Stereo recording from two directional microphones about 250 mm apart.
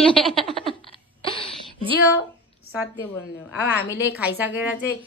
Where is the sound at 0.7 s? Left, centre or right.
Left.